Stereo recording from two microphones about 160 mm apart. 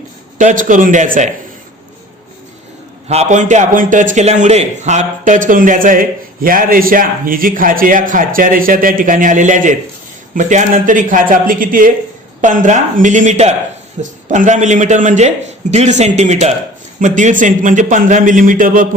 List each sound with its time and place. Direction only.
0.3 s a man's voice: 55° right (ahead or behind)
3.1 s a man's voice: 45° right (ahead or behind)